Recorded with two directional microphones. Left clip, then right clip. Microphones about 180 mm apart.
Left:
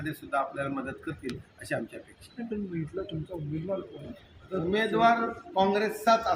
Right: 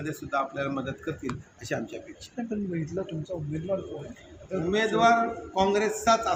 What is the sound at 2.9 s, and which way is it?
Speech, 40° right (ahead or behind).